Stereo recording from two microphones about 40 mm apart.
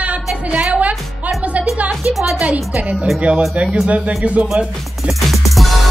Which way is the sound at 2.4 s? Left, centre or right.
Right.